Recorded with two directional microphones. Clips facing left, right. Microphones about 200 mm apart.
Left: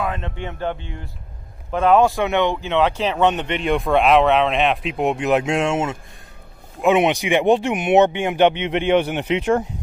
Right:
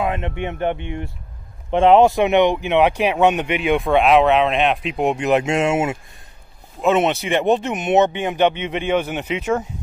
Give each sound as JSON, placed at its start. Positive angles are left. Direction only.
{"t": 0.0, "sound": "speech", "side_deg": -20}
{"t": 6.8, "sound": "speech", "side_deg": 15}